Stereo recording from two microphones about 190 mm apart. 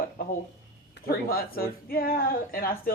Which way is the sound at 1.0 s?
50° left (ahead or behind).